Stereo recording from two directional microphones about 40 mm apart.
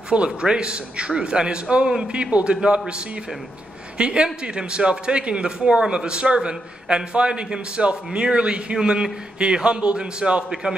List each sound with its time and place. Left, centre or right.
0.1 s speech: right
4.0 s speech: right